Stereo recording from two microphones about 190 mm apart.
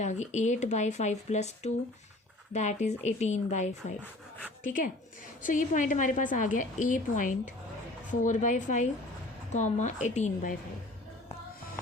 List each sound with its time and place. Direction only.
0.0 s a woman's voice: 35° left (ahead or behind)